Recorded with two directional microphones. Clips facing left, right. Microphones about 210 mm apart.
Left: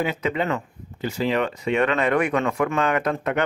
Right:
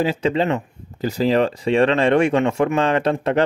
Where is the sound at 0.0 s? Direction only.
30° right (ahead or behind).